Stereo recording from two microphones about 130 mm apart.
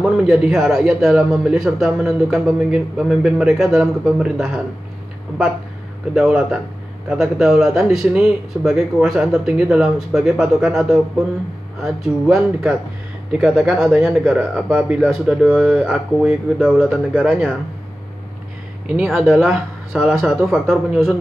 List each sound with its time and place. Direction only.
0.0 s a man's voice: 5° right (ahead or behind)
6.1 s a man's voice: 5° right (ahead or behind)
19.0 s a man's voice: 5° left (ahead or behind)